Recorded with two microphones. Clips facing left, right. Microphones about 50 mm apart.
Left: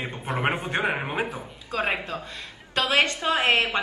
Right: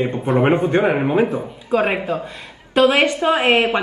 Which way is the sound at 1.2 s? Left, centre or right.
Right.